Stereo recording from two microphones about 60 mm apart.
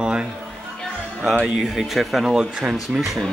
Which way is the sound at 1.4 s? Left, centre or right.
Centre.